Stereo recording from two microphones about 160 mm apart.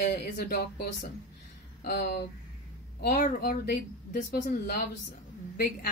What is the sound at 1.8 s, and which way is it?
Speech, 90° left.